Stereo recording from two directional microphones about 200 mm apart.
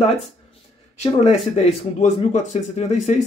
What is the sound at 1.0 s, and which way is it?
Speech, 30° left (ahead or behind).